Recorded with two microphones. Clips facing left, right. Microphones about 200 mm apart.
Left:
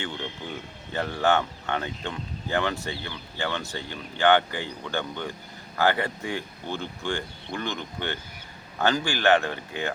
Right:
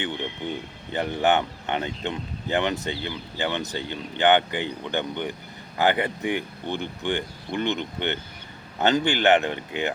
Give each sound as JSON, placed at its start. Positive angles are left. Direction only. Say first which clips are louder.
{"t": 0.0, "sound": "speech", "louder": "right 4 dB", "side_deg": -20}